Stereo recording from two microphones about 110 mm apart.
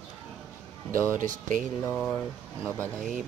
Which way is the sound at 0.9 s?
25° right (ahead or behind).